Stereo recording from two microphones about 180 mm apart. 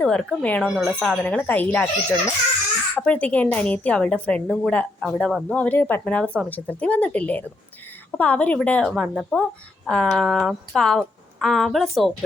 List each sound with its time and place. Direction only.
0.0 s speech: 5° left (ahead or behind)